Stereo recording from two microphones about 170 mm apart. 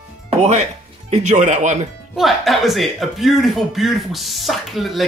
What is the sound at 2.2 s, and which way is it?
Speech, centre (ahead or behind).